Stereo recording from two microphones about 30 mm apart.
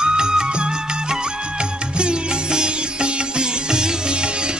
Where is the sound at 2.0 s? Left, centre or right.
Right.